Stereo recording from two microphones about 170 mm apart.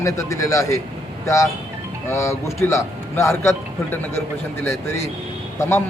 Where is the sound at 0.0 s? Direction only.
20° left (ahead or behind).